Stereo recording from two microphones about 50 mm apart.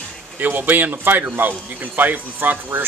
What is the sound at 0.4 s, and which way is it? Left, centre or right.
Speech, right.